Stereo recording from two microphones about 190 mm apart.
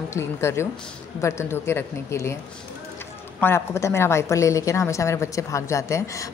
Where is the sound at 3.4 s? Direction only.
15° left (ahead or behind).